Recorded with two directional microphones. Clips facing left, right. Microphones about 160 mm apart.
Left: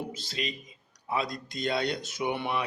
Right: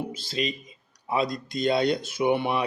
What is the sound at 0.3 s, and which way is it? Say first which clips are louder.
Speech: right 6 dB; 25° right (ahead or behind).